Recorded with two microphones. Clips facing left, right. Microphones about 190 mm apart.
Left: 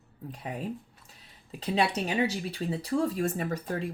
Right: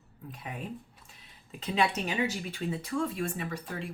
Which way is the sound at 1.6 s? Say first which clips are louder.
Left 2 dB; 35° left (ahead or behind).